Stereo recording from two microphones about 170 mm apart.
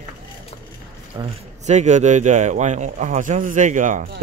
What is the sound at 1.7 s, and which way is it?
Speech, 45° right (ahead or behind).